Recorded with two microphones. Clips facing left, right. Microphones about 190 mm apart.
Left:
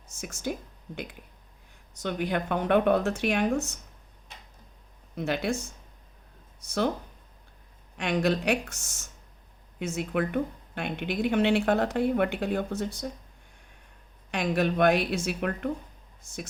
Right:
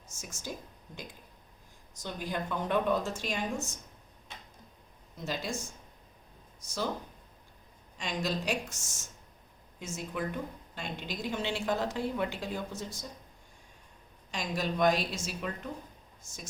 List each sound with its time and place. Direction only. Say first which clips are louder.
0.2 s a woman's voice: left 9 dB; 60° left (ahead or behind)
1.9 s a woman's voice: left 8 dB; 65° left (ahead or behind)
5.1 s a woman's voice: left 7 dB; 65° left (ahead or behind)
6.7 s a woman's voice: left 7 dB; 65° left (ahead or behind)
7.9 s a woman's voice: left 8 dB; 60° left (ahead or behind)
14.3 s a woman's voice: left 8 dB; 60° left (ahead or behind)